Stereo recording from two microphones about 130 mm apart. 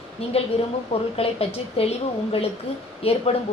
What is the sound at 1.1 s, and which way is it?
A woman's voice, 50° left (ahead or behind).